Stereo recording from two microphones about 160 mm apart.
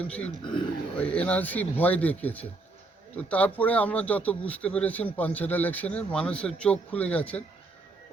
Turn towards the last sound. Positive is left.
turn(degrees=10)  # may be behind; listen again after turning